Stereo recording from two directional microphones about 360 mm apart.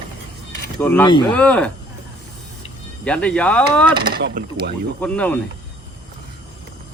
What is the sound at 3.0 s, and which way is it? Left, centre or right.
Speech, centre.